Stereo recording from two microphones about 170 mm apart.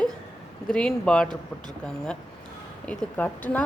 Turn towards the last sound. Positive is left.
turn(degrees=10)  # may be behind; listen again after turning